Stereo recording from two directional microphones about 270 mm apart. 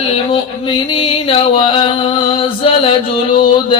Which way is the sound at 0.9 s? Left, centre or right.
Centre.